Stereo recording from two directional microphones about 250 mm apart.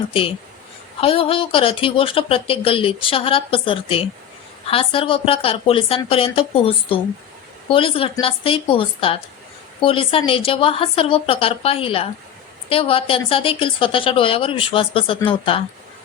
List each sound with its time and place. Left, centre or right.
0.1 s speech: left